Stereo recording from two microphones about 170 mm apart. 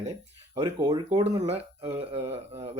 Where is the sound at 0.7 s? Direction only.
20° right (ahead or behind).